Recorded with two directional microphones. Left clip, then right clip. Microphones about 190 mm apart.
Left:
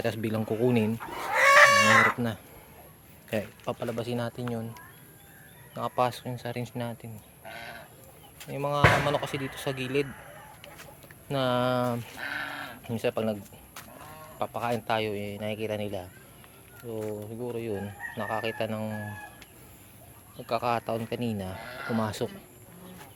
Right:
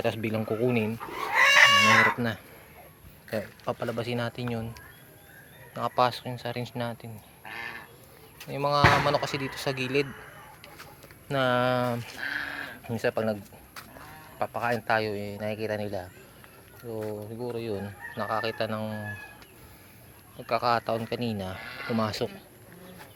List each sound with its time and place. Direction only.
0.0 s speech: 10° left (ahead or behind)
2.0 s speech: 5° left (ahead or behind)
3.7 s speech: centre (ahead or behind)
7.4 s dog: 30° left (ahead or behind)
8.4 s speech: 10° right (ahead or behind)
11.3 s speech: 5° right (ahead or behind)
12.2 s a sound: 55° left (ahead or behind)
12.8 s speech: centre (ahead or behind)
20.5 s speech: centre (ahead or behind)
21.6 s speech: 40° left (ahead or behind)
21.9 s speech: 5° left (ahead or behind)